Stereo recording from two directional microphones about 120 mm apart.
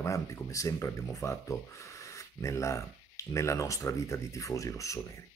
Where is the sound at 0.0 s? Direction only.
25° left (ahead or behind).